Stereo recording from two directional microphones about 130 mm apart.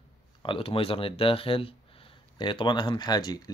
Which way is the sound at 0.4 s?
40° left (ahead or behind).